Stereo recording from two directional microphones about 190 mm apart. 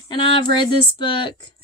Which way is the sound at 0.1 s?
25° left (ahead or behind).